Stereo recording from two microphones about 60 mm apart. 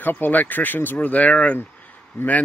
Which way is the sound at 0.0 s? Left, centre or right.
Left.